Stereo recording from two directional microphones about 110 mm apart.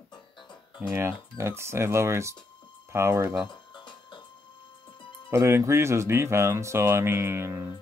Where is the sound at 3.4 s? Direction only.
45° left (ahead or behind).